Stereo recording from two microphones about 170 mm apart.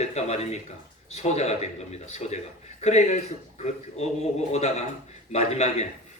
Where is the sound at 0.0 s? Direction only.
40° left (ahead or behind).